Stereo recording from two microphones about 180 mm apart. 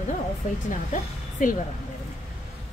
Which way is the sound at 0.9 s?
45° left (ahead or behind).